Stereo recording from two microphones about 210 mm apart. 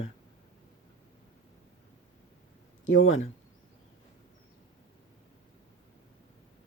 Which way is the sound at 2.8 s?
70° left (ahead or behind).